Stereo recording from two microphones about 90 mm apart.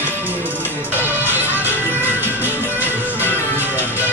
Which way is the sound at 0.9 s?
20° right (ahead or behind).